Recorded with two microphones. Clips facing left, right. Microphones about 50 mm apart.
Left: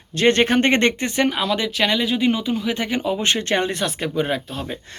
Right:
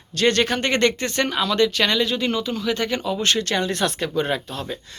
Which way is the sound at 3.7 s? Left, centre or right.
Centre.